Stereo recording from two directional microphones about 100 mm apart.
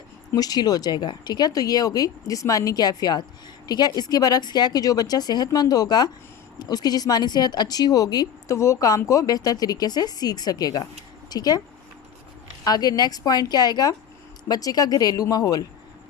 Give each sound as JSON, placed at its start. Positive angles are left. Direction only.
{"t": 0.3, "sound": "speech", "side_deg": 40}
{"t": 12.6, "sound": "speech", "side_deg": 40}